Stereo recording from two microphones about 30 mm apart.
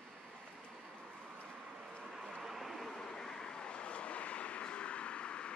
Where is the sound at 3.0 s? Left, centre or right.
Centre.